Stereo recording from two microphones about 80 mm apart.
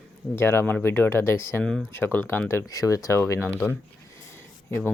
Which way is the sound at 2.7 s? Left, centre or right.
Left.